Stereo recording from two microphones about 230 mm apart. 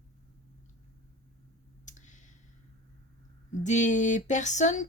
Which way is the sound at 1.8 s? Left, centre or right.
Left.